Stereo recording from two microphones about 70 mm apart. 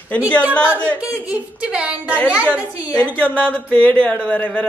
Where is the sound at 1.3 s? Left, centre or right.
Centre.